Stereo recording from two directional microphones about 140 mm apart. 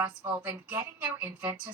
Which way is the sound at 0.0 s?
10° right (ahead or behind).